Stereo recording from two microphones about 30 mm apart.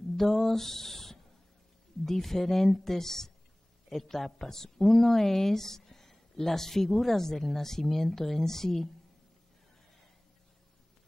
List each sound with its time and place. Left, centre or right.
0.2 s speech: centre